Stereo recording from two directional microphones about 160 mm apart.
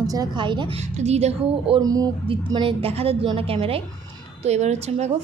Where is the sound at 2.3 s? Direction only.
35° right (ahead or behind).